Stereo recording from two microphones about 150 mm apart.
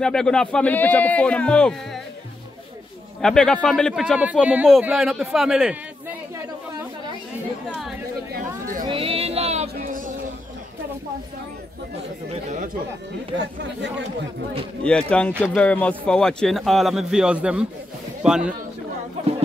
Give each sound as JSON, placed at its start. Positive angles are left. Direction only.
{"t": 0.0, "sound": "speech", "side_deg": 5}
{"t": 3.2, "sound": "speech", "side_deg": 5}
{"t": 8.3, "sound": "chatter", "side_deg": -65}
{"t": 8.8, "sound": "a sound", "side_deg": -40}
{"t": 12.3, "sound": "speech", "side_deg": -50}
{"t": 14.8, "sound": "speech", "side_deg": 5}